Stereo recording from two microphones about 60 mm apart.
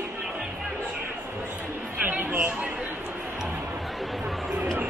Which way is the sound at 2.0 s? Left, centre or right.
Right.